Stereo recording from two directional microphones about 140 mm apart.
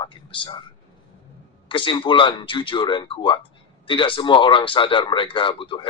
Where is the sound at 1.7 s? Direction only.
35° left (ahead or behind).